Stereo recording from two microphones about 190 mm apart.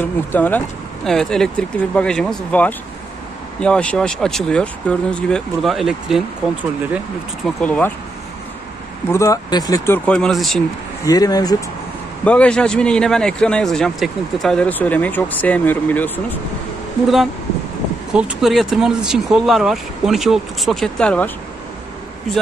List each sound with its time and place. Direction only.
0.0 s speech: 10° left (ahead or behind)
7.4 s speech: 5° left (ahead or behind)
9.0 s speech: 15° left (ahead or behind)
10.0 s speech: 5° left (ahead or behind)
11.1 s speech: 20° left (ahead or behind)
12.3 s speech: 5° left (ahead or behind)
18.1 s speech: 5° right (ahead or behind)